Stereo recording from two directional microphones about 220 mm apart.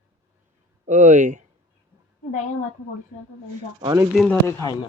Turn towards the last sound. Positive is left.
turn(degrees=10)  # may be behind; listen again after turning